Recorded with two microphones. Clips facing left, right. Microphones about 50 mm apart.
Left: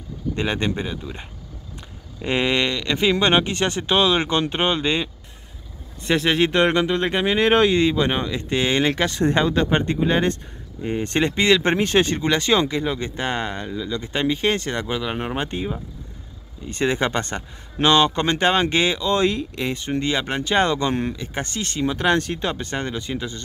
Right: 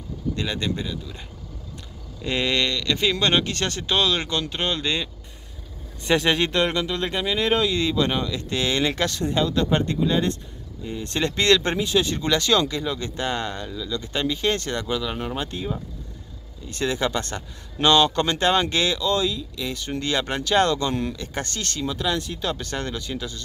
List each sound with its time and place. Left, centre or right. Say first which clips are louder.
0.4 s speech: left 5 dB; left
2.2 s speech: left 3 dB; left
6.5 s speech: left 5 dB; left
11.2 s speech: even; centre
11.8 s speech: left 3 dB; left
12.2 s speech: left 2 dB; left
16.6 s speech: left 3 dB; left
17.7 s speech: left 1 dB; centre
19.1 s speech: left 4 dB; left
19.7 s speech: left 2 dB; left
21.2 s speech: left 2 dB; centre
21.9 s speech: left 7 dB; left
22.4 s speech: left 2 dB; left